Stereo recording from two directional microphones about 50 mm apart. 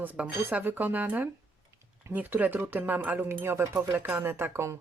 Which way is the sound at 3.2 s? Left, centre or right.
Right.